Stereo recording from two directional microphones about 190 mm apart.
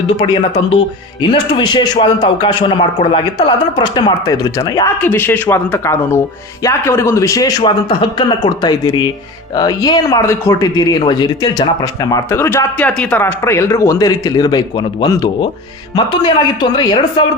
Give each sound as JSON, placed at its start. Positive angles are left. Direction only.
{"t": 0.1, "sound": "speech", "side_deg": 30}